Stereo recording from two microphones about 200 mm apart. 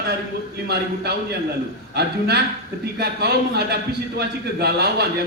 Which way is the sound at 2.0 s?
55° right (ahead or behind).